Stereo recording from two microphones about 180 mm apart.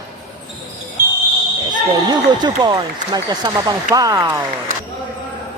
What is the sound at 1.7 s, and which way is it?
Speech, 25° right (ahead or behind).